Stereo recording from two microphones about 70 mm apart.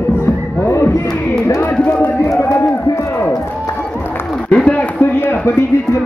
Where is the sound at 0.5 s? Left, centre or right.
Left.